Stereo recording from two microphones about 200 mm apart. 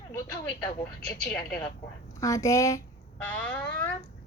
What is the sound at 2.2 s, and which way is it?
Speech, 15° left (ahead or behind).